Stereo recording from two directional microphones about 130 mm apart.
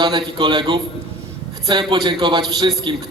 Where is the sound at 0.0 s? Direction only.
35° right (ahead or behind).